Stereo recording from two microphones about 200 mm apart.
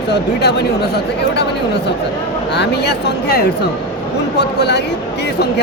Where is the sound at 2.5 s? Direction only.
55° left (ahead or behind).